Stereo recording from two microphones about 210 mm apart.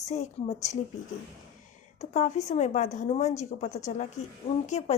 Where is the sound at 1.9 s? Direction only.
35° left (ahead or behind).